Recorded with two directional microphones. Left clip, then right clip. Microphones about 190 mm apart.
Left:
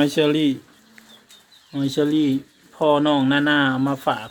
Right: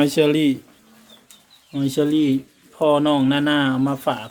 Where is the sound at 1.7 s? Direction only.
Centre (ahead or behind).